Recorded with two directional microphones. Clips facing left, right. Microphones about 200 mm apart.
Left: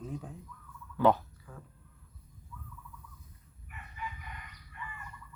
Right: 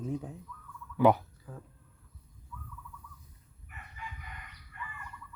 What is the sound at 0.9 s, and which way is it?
Fowl, 15° right (ahead or behind).